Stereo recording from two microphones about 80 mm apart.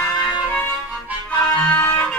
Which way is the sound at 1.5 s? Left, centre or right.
Centre.